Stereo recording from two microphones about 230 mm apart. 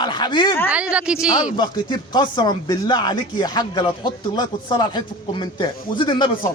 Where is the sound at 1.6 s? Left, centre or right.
Centre.